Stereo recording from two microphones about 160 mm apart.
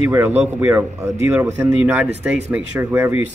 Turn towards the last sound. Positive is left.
turn(degrees=-15)  # may be behind; listen again after turning